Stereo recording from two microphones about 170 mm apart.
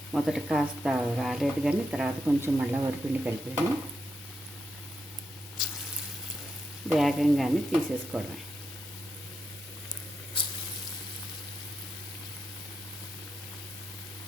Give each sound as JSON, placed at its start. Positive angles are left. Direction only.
{"t": 0.1, "sound": "speech", "side_deg": 0}
{"t": 6.9, "sound": "speech", "side_deg": 0}
{"t": 10.4, "sound": "a sound", "side_deg": 30}